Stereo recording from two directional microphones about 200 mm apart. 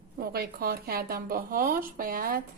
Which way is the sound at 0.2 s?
50° right (ahead or behind).